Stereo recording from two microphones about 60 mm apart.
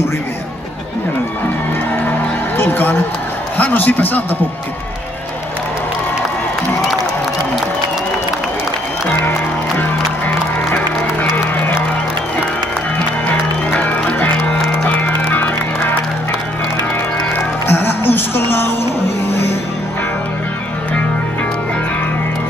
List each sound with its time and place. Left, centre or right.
2.0 s music: left
3.5 s a man's voice: left
9.2 s music: left
13.8 s music: left
17.6 s music: left